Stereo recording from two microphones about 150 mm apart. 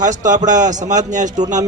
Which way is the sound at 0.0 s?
55° right (ahead or behind).